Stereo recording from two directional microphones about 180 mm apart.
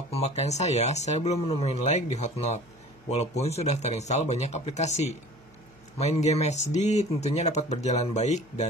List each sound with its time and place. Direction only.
0.1 s speech: 35° left (ahead or behind)